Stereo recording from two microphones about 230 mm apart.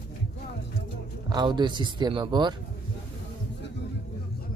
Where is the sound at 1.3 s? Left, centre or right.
Centre.